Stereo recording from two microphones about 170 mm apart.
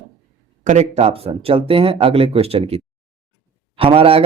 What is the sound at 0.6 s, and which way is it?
Speech, 45° right (ahead or behind).